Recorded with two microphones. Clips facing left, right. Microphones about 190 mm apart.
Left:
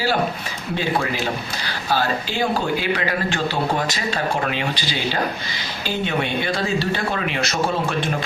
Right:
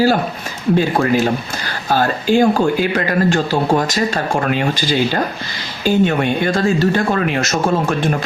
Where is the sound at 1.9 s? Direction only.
50° right (ahead or behind).